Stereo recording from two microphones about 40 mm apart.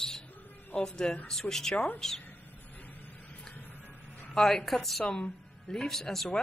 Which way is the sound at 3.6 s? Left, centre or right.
Left.